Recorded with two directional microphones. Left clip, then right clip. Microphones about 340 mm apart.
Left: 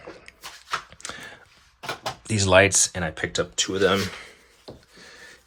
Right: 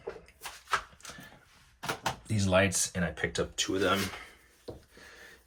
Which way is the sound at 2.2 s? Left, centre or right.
Centre.